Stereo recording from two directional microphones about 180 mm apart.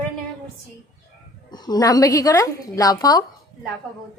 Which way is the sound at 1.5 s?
20° left (ahead or behind).